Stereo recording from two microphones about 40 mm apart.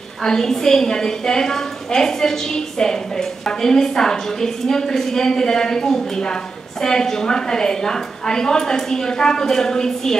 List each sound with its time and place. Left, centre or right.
0.2 s a woman's voice: centre